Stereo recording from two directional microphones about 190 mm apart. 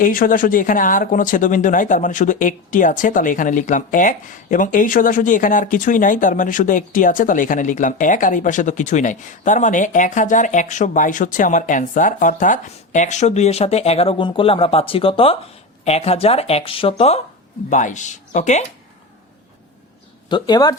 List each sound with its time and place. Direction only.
0.0 s speech: 45° left (ahead or behind); by 17.2 s 30° left (ahead or behind)
17.7 s speech: 40° left (ahead or behind)
20.3 s speech: 20° left (ahead or behind)